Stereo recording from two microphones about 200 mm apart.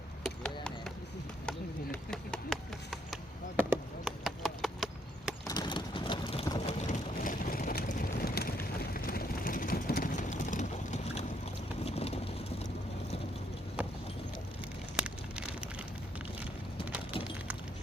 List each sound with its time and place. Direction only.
0.3 s a sound: 5° left (ahead or behind)
3.6 s chop: 10° right (ahead or behind)
4.2 s horse: centre (ahead or behind)
5.5 s vehicle: 20° left (ahead or behind)
6.7 s vehicle: 40° left (ahead or behind)
14.9 s a sound: 5° right (ahead or behind)